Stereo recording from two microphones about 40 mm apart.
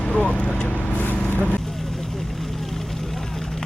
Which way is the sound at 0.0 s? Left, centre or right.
Left.